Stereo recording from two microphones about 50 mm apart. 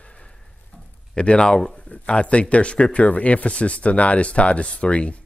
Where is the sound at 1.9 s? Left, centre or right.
Left.